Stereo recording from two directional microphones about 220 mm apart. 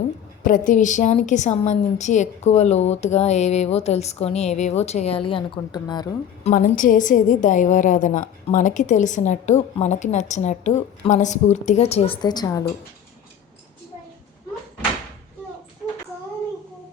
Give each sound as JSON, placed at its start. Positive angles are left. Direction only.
{"t": 0.4, "sound": "a woman's voice", "side_deg": 35}
{"t": 6.4, "sound": "a woman's voice", "side_deg": 35}